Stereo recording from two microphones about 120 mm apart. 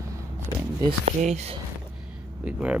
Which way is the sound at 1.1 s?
80° right.